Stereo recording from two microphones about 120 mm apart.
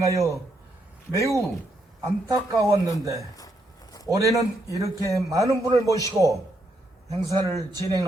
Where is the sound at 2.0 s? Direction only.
25° right (ahead or behind).